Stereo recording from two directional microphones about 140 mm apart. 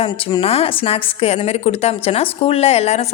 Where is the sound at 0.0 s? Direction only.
40° left (ahead or behind).